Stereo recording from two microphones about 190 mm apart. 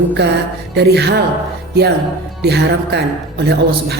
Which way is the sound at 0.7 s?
60° right (ahead or behind).